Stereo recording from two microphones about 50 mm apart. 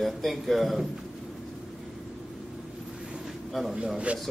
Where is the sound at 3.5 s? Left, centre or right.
Centre.